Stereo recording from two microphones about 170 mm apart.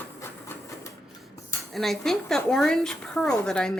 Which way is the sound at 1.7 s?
Centre (ahead or behind).